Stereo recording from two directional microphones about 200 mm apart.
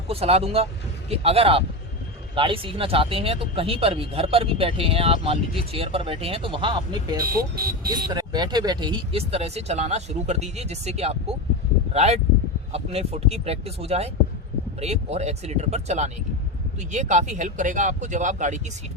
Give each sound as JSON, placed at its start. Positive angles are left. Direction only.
{"t": 0.1, "sound": "speech", "side_deg": -30}
{"t": 7.2, "sound": "speech", "side_deg": -50}
{"t": 8.0, "sound": "speech", "side_deg": -20}